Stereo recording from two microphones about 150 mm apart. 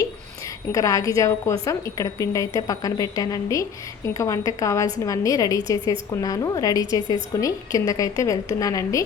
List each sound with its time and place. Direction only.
0.7 s a woman's voice: 20° left (ahead or behind)